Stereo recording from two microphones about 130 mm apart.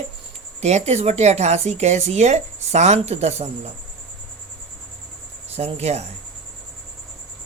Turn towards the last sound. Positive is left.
turn(degrees=-55)  # may be behind; listen again after turning